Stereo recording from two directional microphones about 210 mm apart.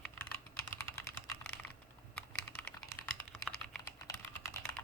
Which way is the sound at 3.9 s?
15° left (ahead or behind).